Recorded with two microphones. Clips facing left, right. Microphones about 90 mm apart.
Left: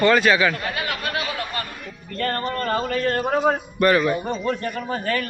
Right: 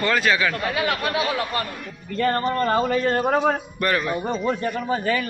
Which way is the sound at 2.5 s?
20° right (ahead or behind).